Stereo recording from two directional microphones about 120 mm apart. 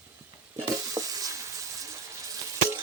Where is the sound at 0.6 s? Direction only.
30° right (ahead or behind).